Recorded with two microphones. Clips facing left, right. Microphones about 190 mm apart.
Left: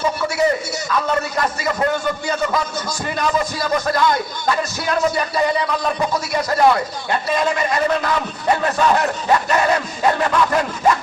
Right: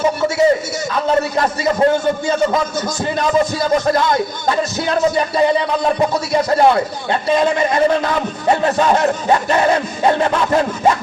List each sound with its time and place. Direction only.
0.2 s speech: 25° right (ahead or behind)